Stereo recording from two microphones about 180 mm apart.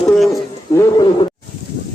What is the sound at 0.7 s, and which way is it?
Speech, 20° left (ahead or behind).